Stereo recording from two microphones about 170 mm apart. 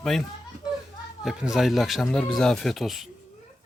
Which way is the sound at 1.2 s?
5° right (ahead or behind).